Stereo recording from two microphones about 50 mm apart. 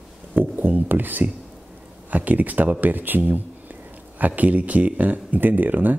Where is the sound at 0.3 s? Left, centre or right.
Right.